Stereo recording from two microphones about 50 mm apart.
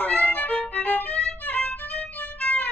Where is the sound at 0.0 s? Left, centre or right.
Left.